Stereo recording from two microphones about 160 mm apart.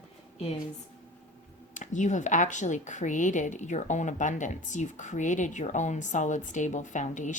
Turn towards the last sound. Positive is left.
turn(degrees=50)  # may be behind; listen again after turning